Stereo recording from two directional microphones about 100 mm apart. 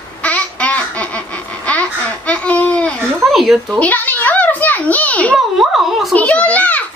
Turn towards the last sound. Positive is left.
turn(degrees=15)  # may be behind; listen again after turning